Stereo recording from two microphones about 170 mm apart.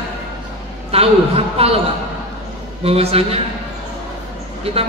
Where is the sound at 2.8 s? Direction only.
35° right (ahead or behind).